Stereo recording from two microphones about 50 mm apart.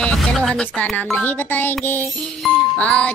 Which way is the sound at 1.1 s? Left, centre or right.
Left.